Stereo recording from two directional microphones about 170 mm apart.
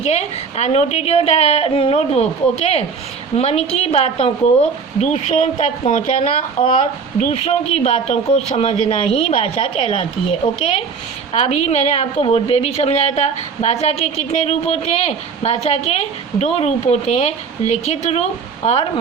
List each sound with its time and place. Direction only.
0.0 s a woman's voice: 40° left (ahead or behind)